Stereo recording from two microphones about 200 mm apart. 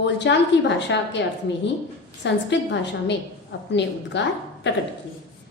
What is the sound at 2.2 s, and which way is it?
A woman's voice, 60° left (ahead or behind).